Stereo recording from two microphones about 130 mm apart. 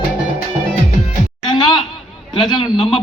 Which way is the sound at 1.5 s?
40° left (ahead or behind).